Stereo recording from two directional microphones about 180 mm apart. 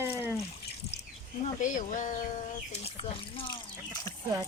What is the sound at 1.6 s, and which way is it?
Speech, 45° left (ahead or behind).